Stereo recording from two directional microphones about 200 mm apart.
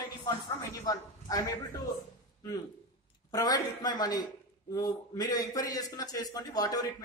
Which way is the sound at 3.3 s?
20° left (ahead or behind).